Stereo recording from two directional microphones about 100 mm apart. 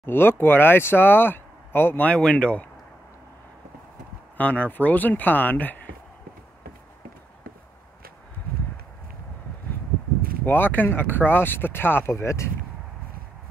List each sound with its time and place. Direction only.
0.0 s speech: 20° left (ahead or behind)
4.4 s speech: 15° left (ahead or behind)
10.4 s speech: 20° left (ahead or behind)